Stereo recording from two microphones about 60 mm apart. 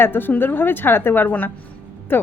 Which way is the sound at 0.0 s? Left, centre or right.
Left.